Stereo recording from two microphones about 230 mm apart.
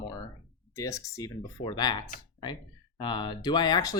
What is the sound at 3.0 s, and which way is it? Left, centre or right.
Speech, centre.